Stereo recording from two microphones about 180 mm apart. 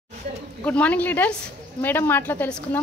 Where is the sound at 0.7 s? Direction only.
10° left (ahead or behind).